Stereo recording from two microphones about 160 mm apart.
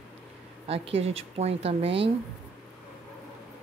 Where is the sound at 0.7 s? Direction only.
40° right (ahead or behind).